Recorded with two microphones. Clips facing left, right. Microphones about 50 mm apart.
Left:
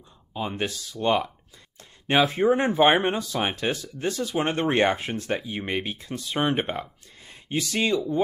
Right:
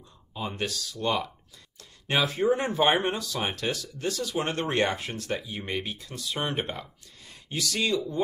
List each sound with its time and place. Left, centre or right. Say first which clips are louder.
0.3 s speech: left 3 dB; left